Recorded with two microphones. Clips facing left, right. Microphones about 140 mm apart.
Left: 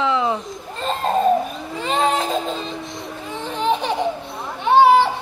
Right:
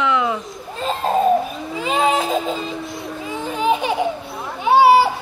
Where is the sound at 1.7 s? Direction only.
5° right (ahead or behind).